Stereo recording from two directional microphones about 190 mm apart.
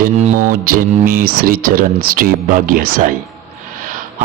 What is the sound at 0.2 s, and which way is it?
Speech, 40° right (ahead or behind).